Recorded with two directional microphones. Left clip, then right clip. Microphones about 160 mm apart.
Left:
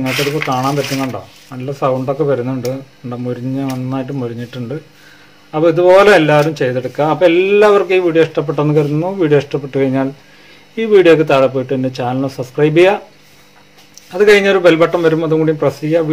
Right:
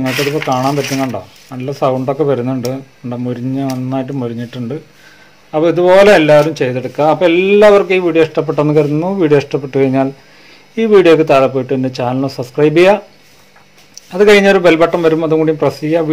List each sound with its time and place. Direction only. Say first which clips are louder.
0.0 s speech: right 1 dB; 10° right (ahead or behind)
1.5 s speech: right 2 dB; 25° right (ahead or behind)
14.1 s speech: right 2 dB; 25° right (ahead or behind)